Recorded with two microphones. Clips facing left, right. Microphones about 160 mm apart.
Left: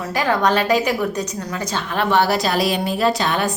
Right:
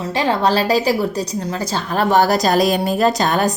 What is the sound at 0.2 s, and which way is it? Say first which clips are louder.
A woman's voice: right 1 dB; 30° right (ahead or behind).